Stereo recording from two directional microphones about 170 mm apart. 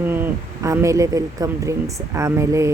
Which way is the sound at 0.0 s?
10° right (ahead or behind).